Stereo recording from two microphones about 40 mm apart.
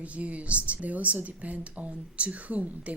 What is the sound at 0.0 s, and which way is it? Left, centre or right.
Speech, right.